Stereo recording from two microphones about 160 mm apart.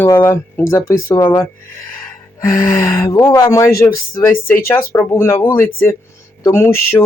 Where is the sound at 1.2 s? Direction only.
30° left (ahead or behind).